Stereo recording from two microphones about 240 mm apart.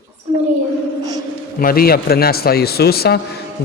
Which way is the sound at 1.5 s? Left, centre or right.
Left.